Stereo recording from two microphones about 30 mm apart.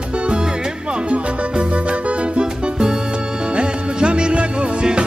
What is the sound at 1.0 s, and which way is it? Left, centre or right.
Music, right.